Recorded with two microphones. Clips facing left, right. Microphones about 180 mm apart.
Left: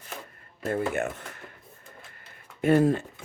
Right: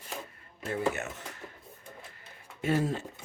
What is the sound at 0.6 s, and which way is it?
Speech, 55° left (ahead or behind).